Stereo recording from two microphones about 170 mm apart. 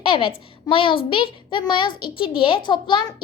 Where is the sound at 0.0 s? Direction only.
30° left (ahead or behind).